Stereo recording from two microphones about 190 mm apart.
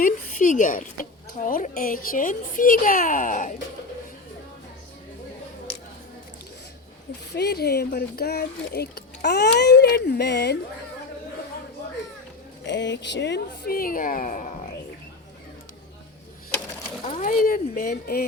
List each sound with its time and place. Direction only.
0.0 s a woman's voice: 45° left (ahead or behind)
7.3 s speech: 60° left (ahead or behind)
12.6 s a woman's voice: 70° left (ahead or behind); by 14.5 s 45° left (ahead or behind)
17.2 s a woman's voice: 45° left (ahead or behind)